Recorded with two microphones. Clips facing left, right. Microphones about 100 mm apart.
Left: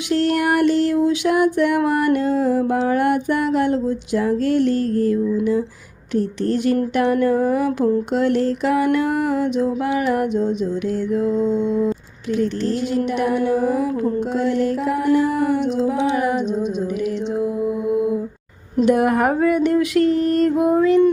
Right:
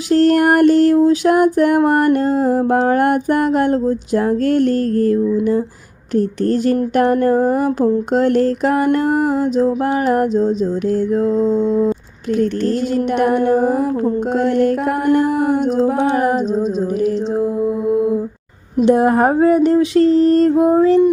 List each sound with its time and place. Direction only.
0.1 s female singing: 40° right (ahead or behind)
8.1 s mantra: 45° right (ahead or behind)
12.4 s female singing: 50° right (ahead or behind)
18.9 s mantra: 30° right (ahead or behind)